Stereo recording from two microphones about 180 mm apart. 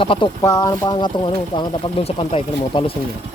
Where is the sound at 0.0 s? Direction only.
30° left (ahead or behind).